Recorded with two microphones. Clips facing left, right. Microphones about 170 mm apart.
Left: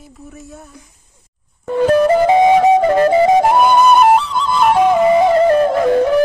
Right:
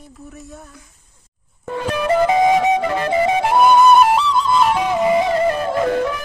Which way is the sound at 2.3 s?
35° left (ahead or behind).